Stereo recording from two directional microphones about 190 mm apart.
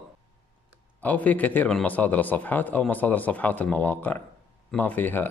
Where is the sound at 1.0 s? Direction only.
10° left (ahead or behind).